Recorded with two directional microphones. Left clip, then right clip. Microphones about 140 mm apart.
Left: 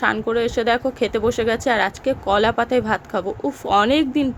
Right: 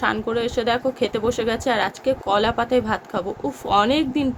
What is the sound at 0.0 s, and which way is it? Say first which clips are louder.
Speech: left 3 dB; 35° left (ahead or behind).